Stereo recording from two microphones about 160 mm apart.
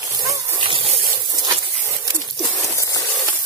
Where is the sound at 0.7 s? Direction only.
35° right (ahead or behind).